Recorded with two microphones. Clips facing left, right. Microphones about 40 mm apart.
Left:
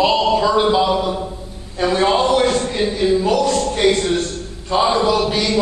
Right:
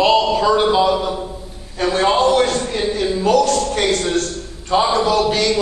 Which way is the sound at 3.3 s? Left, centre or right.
Left.